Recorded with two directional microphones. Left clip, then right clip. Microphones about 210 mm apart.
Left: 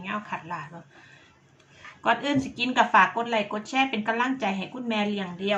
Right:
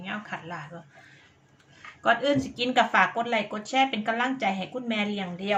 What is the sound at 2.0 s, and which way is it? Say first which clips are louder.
A woman's voice: right 1 dB; centre (ahead or behind).